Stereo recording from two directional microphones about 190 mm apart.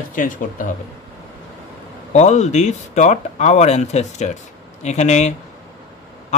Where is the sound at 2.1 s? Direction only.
35° left (ahead or behind).